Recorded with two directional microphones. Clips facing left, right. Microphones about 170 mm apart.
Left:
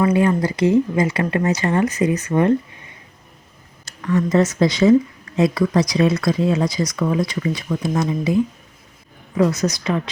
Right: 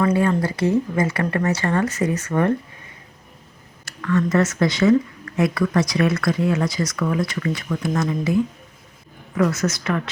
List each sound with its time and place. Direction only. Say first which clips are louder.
0.0 s speech: left 2 dB; 20° left (ahead or behind)
3.8 s speech: left 1 dB; 20° left (ahead or behind)